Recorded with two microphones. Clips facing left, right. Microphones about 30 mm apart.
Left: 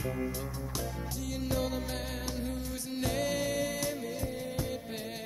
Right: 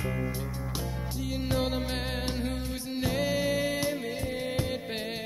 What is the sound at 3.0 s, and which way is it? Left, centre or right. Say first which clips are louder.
Music: right 3 dB; centre.